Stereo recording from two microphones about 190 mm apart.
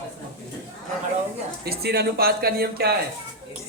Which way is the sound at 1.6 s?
55° right (ahead or behind).